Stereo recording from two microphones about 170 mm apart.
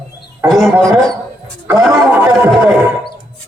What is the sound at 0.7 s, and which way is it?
Speech, 20° right (ahead or behind).